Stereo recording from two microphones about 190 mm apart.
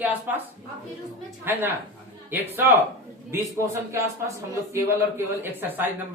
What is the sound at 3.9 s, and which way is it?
Speech, 15° right (ahead or behind).